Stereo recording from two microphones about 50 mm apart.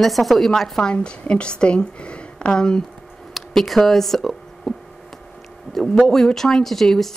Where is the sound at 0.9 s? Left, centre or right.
Left.